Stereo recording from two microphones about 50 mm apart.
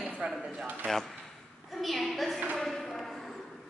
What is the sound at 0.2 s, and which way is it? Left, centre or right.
Speech, right.